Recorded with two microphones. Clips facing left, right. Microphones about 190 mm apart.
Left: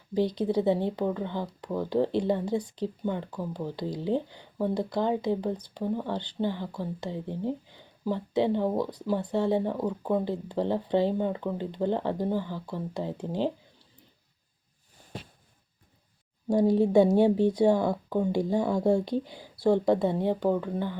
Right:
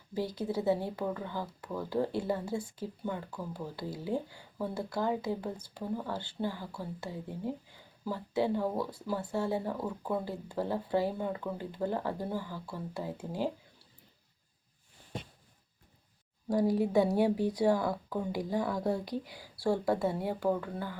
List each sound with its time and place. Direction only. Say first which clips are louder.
0.3 s speech: left 2 dB; 20° left (ahead or behind)
16.5 s speech: left 6 dB; 25° left (ahead or behind)